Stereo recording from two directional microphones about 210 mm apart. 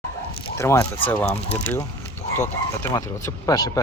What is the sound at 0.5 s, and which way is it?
Speech, 15° left (ahead or behind).